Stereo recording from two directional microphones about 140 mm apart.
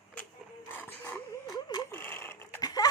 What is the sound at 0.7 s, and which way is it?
Dog, 15° left (ahead or behind).